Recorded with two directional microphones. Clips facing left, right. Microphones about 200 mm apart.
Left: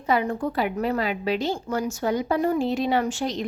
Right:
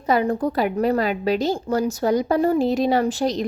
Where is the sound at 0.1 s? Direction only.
40° right (ahead or behind).